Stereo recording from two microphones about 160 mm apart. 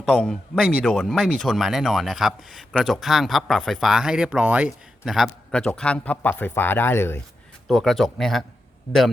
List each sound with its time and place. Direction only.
0.0 s speech: 5° left (ahead or behind)
7.7 s speech: centre (ahead or behind)